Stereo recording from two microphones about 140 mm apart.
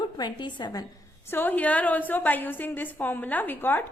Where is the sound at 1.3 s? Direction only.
15° left (ahead or behind).